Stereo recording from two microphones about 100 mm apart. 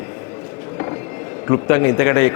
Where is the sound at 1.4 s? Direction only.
30° left (ahead or behind).